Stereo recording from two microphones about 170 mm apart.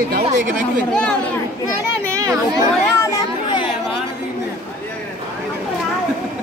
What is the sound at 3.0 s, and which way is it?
Children playing, 25° left (ahead or behind).